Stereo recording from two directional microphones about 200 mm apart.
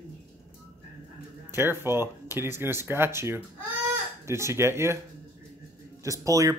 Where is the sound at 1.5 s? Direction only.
10° right (ahead or behind).